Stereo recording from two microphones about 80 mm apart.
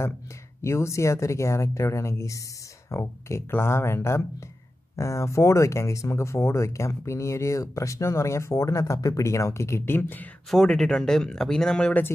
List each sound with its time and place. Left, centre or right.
0.6 s speech: left
10.5 s speech: centre